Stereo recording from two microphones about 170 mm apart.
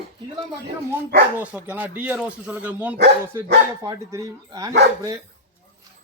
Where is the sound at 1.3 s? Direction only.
10° right (ahead or behind).